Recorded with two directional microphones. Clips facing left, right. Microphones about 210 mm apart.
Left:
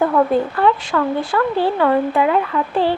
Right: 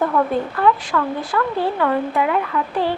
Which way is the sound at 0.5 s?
25° left (ahead or behind).